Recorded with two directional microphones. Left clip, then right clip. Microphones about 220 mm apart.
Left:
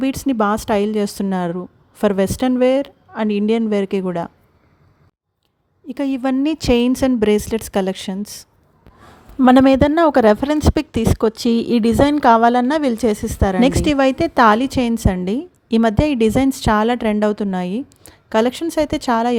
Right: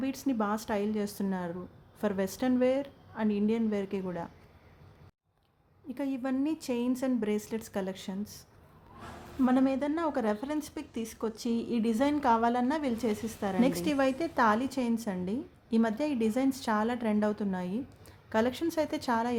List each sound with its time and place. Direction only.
0.0 s a woman's voice: 35° left (ahead or behind)
5.9 s a woman's voice: 35° left (ahead or behind)